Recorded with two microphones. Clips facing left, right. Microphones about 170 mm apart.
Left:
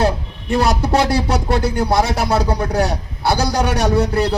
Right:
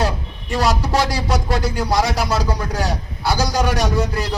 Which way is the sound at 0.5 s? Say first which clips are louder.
Left 3 dB; 55° left (ahead or behind).